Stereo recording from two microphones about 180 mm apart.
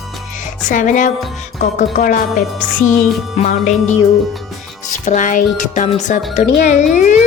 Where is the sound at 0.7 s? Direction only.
45° left (ahead or behind).